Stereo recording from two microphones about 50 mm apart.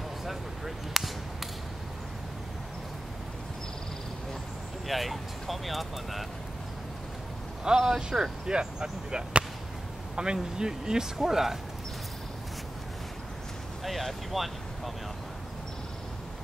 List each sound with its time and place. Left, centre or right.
0.2 s speech: centre
4.8 s speech: centre
7.6 s speech: centre
13.8 s speech: centre